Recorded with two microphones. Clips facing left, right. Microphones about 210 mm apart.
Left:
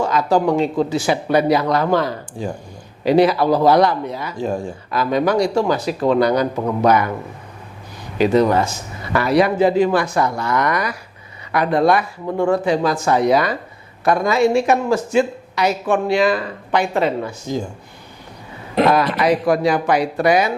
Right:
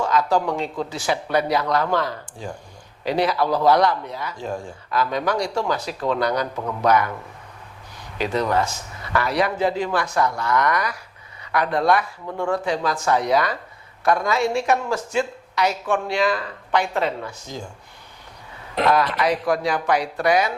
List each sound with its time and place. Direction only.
0.0 s speech: 10° left (ahead or behind)
6.6 s a man's voice: 30° left (ahead or behind)
6.8 s speech: 10° left (ahead or behind)
8.2 s speech: 10° left (ahead or behind)
12.2 s speech: 30° left (ahead or behind)
12.6 s speech: 5° left (ahead or behind)
18.7 s speech: 10° left (ahead or behind)